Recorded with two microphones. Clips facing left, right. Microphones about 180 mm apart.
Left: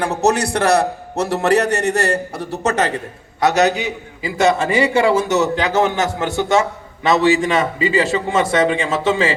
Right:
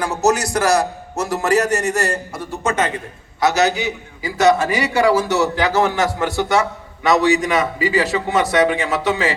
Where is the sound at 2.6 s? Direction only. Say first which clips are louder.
Left 2 dB; 35° left (ahead or behind).